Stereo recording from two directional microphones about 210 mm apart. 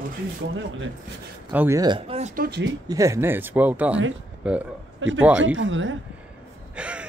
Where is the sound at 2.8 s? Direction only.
15° right (ahead or behind).